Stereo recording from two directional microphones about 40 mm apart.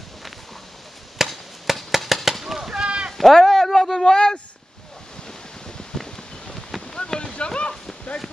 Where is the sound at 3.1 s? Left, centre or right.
Centre.